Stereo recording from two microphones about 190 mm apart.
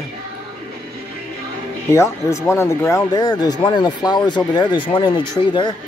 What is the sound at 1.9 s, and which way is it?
Speech, 15° left (ahead or behind).